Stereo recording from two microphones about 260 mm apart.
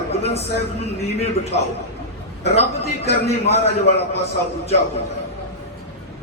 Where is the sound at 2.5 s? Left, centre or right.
Left.